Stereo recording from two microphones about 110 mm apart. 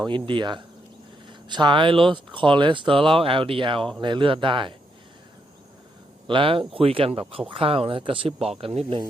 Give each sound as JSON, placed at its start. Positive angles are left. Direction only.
{"t": 0.0, "sound": "speech", "side_deg": -45}
{"t": 6.2, "sound": "speech", "side_deg": -50}